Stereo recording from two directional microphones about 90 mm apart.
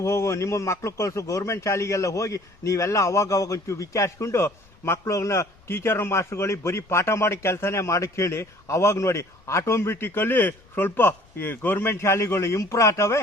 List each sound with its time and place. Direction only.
0.0 s speech: 30° left (ahead or behind)